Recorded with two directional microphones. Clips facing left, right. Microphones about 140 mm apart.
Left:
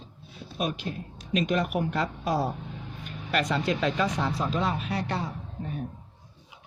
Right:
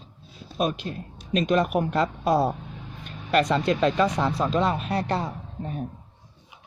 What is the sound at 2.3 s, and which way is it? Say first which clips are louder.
Speech: right 6 dB; 55° right (ahead or behind).